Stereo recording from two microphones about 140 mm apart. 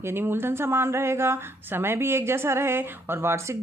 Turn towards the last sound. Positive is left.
turn(degrees=-20)  # may be behind; listen again after turning